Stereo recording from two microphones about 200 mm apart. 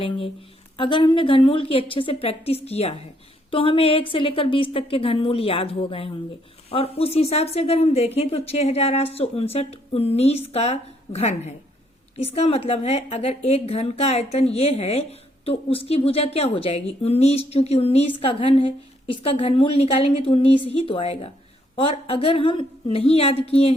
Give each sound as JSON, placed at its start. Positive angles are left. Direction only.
{"t": 0.8, "sound": "a woman's voice", "side_deg": 25}